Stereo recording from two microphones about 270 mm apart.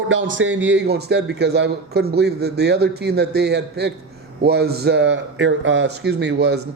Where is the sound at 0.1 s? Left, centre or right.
Right.